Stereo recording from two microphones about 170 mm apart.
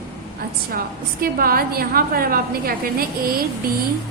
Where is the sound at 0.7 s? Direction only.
60° right (ahead or behind).